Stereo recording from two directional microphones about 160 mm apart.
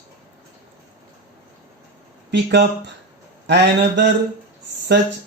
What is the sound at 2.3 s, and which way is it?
Speech, 90° right.